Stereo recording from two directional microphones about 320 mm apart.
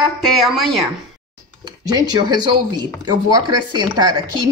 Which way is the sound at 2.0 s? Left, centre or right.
Centre.